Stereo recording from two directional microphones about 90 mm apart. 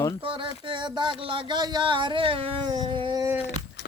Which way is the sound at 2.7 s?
60° right (ahead or behind).